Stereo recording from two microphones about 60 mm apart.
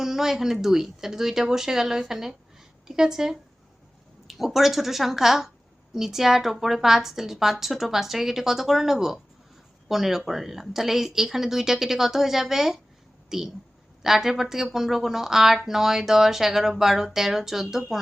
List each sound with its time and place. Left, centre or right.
0.0 s a woman's voice: centre